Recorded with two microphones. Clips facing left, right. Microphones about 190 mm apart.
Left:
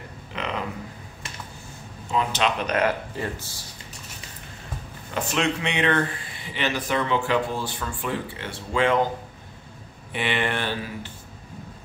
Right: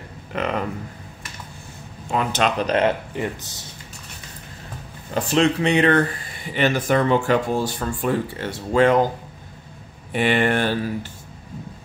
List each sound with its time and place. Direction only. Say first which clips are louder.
0.3 s a sound: right 6 dB; 50° right (ahead or behind)
2.0 s speech: right 3 dB; 55° right (ahead or behind)
2.6 s speech: right 4 dB; 25° right (ahead or behind)
5.1 s speech: right 6 dB; 35° right (ahead or behind)
10.1 s speech: right 7 dB; 45° right (ahead or behind)